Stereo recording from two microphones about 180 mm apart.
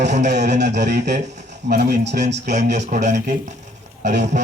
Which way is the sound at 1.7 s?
65° right (ahead or behind).